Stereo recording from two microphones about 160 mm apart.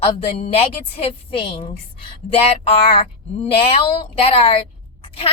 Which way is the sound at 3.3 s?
35° left (ahead or behind).